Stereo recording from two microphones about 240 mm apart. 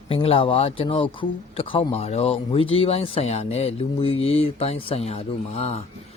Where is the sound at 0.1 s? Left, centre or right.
Left.